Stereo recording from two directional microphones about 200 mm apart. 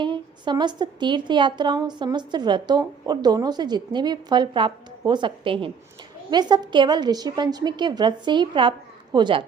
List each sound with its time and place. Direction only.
0.0 s a woman's voice: 25° right (ahead or behind)